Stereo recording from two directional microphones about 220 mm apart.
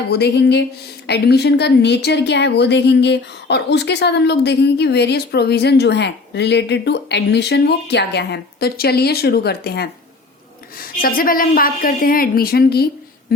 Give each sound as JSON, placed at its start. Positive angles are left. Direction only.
{"t": 0.1, "sound": "a woman's voice", "side_deg": 50}